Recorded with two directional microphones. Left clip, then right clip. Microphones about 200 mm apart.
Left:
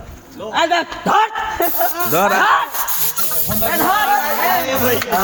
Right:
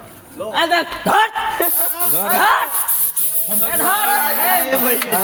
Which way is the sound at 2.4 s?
20° right (ahead or behind).